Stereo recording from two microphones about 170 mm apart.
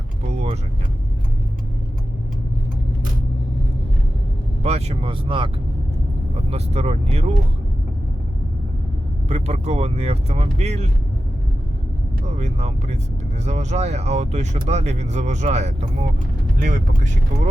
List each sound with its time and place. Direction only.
0.3 s vehicle: 40° right (ahead or behind)
4.6 s speech: 40° right (ahead or behind)
9.3 s speech: 40° right (ahead or behind)
12.4 s speech: 40° right (ahead or behind)